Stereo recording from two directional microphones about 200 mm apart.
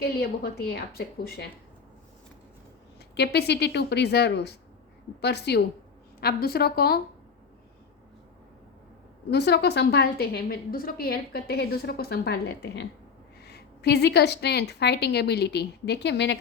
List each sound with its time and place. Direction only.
0.0 s a woman's voice: 50° left (ahead or behind)
3.2 s a woman's voice: 55° left (ahead or behind)
9.3 s a woman's voice: 55° left (ahead or behind)